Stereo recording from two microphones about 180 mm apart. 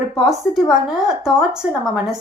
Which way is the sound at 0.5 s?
Centre (ahead or behind).